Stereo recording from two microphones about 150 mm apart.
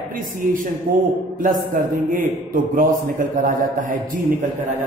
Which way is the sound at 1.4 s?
65° right (ahead or behind).